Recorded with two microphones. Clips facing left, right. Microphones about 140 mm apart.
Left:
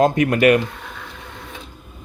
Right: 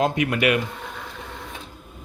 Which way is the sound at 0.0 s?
45° left (ahead or behind).